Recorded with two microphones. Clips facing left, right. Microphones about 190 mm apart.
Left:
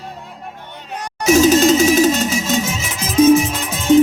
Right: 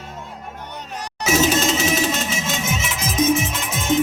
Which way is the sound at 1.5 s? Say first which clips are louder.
Left 8 dB; 40° left (ahead or behind).